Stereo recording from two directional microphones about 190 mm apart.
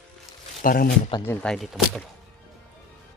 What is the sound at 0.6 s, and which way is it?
Speech, 50° left (ahead or behind).